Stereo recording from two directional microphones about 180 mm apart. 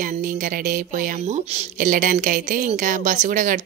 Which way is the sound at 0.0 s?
50° right (ahead or behind).